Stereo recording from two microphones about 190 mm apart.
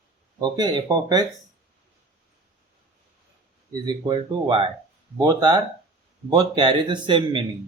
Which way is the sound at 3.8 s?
25° right (ahead or behind).